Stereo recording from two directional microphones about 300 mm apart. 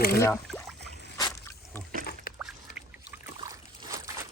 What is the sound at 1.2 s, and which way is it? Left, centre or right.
Rowboat, centre.